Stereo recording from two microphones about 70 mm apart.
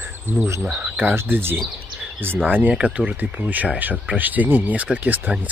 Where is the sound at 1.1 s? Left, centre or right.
Right.